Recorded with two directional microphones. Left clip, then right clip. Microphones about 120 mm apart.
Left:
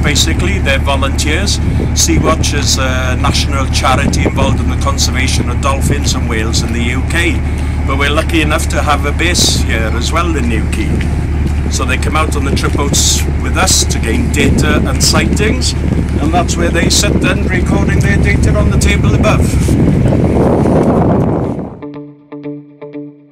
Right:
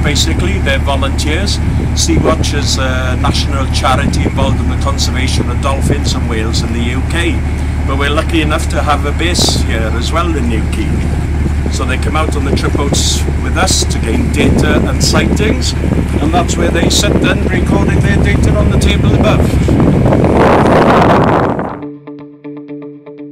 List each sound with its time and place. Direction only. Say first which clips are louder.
0.0 s speech: left 1 dB; 5° left (ahead or behind)
11.9 s speech: left 1 dB; 5° left (ahead or behind)
19.6 s vehicle: right 2 dB; 20° left (ahead or behind)